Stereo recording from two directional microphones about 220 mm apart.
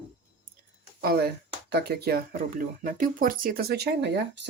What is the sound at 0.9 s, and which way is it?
Speech, 45° right (ahead or behind).